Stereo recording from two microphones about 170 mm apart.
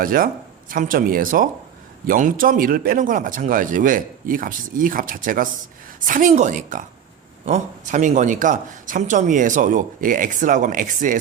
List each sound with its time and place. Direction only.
0.0 s speech: 55° right (ahead or behind)